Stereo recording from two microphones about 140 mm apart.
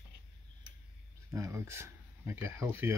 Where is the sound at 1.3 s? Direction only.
20° right (ahead or behind).